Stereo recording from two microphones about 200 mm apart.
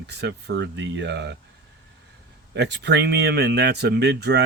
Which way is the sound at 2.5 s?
60° right (ahead or behind).